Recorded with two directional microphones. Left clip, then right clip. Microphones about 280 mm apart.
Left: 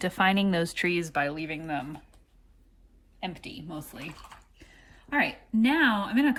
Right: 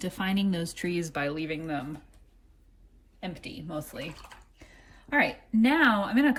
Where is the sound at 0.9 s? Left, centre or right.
Centre.